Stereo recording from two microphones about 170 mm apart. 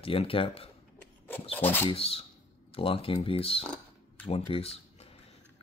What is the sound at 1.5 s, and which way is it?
Speech, 10° left (ahead or behind).